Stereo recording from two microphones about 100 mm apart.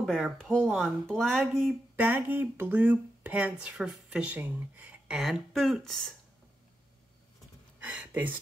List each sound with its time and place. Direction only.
0.0 s speech: 5° left (ahead or behind)
2.0 s speech: 20° right (ahead or behind); by 6.1 s 5° left (ahead or behind)
7.8 s speech: 15° right (ahead or behind)